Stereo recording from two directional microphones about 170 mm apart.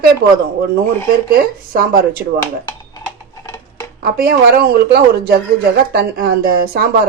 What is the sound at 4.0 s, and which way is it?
A man's voice, 60° right (ahead or behind).